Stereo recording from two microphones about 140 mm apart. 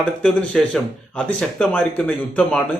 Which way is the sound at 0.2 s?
5° left (ahead or behind).